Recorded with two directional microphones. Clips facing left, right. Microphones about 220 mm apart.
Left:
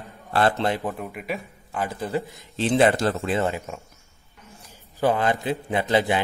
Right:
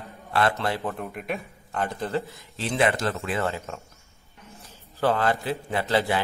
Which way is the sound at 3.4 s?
15° left (ahead or behind).